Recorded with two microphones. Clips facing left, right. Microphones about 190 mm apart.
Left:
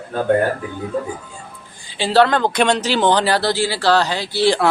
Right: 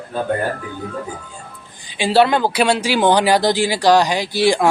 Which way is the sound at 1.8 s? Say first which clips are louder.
Even; 15° right (ahead or behind).